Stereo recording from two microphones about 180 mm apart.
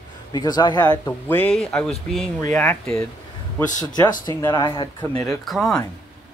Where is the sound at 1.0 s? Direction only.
10° left (ahead or behind).